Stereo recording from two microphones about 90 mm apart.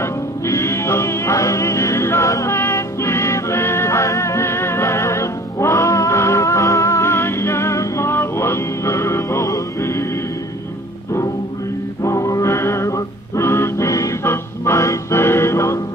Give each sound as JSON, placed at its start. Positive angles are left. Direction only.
{"t": 0.0, "sound": "music", "side_deg": 30}
{"t": 12.0, "sound": "music", "side_deg": 40}